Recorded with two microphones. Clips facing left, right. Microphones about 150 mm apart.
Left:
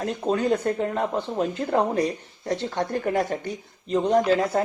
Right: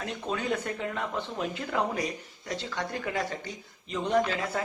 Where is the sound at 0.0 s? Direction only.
40° left (ahead or behind).